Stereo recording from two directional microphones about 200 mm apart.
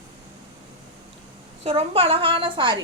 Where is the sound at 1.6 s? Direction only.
30° right (ahead or behind).